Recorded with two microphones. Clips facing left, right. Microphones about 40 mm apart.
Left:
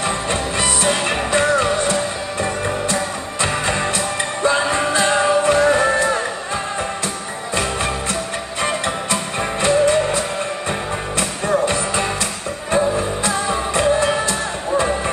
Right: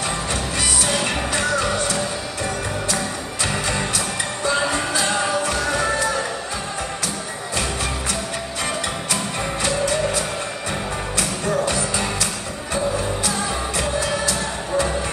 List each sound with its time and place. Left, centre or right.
0.3 s music: left
9.1 s music: left